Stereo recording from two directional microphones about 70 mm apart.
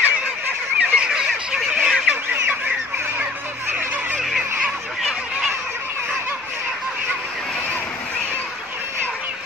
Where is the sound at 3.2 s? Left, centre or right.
Right.